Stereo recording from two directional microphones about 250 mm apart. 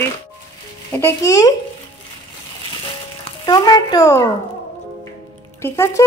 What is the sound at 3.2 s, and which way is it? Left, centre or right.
A child's voice, centre.